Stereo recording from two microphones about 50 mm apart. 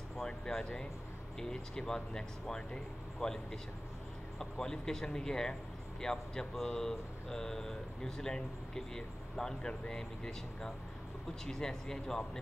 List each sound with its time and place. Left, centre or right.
0.2 s speech: centre
4.4 s speech: centre